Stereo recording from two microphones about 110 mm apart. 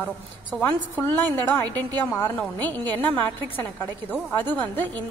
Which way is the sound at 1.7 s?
40° right (ahead or behind).